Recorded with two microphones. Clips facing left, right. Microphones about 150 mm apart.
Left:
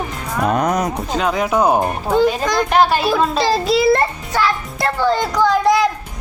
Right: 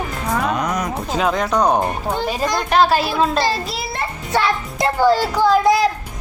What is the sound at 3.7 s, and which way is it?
Music, 90° left.